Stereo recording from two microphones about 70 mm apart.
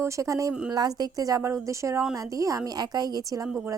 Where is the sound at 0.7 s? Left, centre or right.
Right.